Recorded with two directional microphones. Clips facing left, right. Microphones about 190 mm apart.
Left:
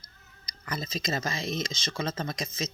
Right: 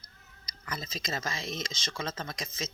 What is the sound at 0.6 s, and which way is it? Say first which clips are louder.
Speech: left 5 dB; 40° left (ahead or behind).